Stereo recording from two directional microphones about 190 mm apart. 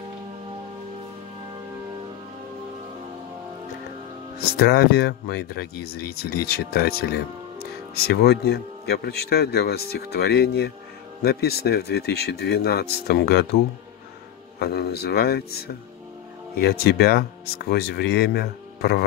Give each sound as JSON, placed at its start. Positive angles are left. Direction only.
{"t": 4.4, "sound": "speech", "side_deg": 55}
{"t": 14.6, "sound": "speech", "side_deg": 55}